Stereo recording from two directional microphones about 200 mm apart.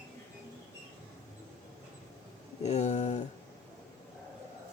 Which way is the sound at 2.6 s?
35° left (ahead or behind).